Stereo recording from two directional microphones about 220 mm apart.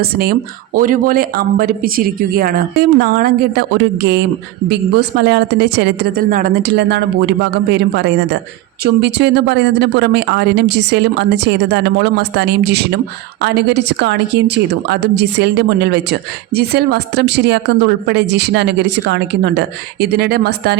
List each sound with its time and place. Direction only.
0.0 s a woman's voice: 45° right (ahead or behind)